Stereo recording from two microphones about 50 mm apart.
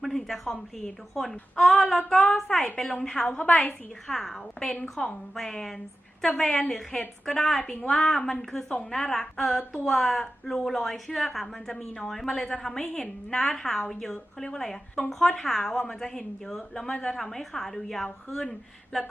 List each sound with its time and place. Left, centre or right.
0.0 s a woman's voice: centre; by 3.8 s left
4.1 s a woman's voice: centre